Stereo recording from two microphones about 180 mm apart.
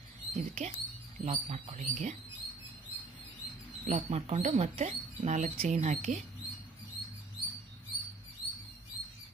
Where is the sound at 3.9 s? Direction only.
35° right (ahead or behind).